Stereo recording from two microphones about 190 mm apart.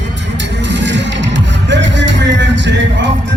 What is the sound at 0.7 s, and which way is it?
Music, 70° right (ahead or behind).